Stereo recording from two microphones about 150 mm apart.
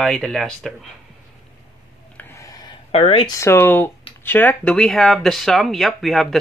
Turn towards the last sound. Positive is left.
turn(degrees=0)  # may be behind; listen again after turning